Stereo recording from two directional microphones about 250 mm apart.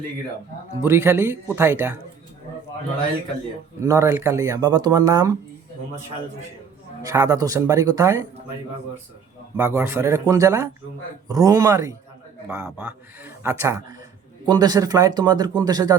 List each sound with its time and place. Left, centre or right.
0.8 s speech: centre
3.8 s speech: centre
7.0 s speech: centre
9.6 s speech: centre